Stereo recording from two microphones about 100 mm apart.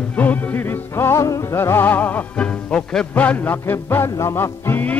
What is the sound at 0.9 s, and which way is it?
Music, 30° left (ahead or behind).